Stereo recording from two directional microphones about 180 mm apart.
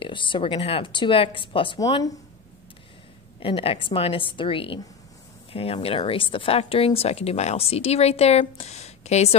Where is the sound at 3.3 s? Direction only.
30° left (ahead or behind).